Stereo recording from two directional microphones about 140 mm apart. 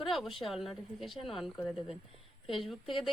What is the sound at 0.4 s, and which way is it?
A woman's voice, centre (ahead or behind).